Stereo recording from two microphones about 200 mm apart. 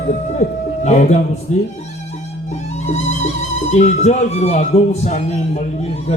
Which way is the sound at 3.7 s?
35° left (ahead or behind).